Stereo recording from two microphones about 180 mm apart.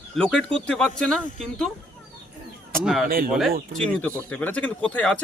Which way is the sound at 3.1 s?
55° right (ahead or behind).